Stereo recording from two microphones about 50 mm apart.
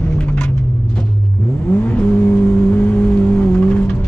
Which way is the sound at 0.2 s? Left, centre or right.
Left.